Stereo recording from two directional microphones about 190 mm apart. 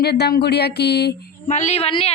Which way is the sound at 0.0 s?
60° left (ahead or behind).